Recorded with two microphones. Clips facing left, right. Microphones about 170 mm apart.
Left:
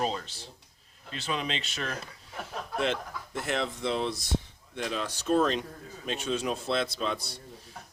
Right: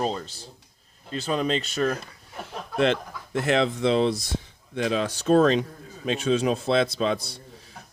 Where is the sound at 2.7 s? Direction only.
90° right.